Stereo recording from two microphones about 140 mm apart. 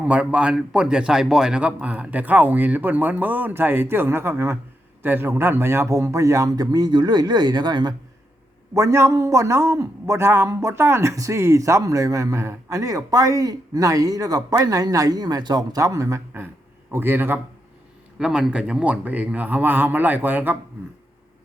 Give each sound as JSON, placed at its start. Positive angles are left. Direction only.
{"t": 0.0, "sound": "a man's voice", "side_deg": -10}
{"t": 8.7, "sound": "a man's voice", "side_deg": -20}
{"t": 18.2, "sound": "a man's voice", "side_deg": -5}